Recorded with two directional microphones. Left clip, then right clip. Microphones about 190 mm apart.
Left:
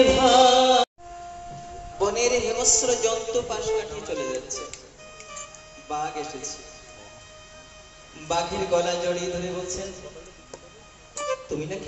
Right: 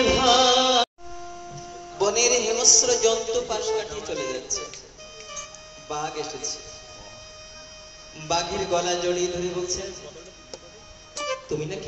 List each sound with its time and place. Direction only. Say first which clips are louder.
0.0 s music: left 2 dB; 25° right (ahead or behind)
2.0 s speech: right 1 dB; 35° right (ahead or behind)
5.3 s music: right 2 dB; 30° right (ahead or behind)
8.3 s a man's voice: even; 30° right (ahead or behind)
11.1 s speech: even; 30° right (ahead or behind)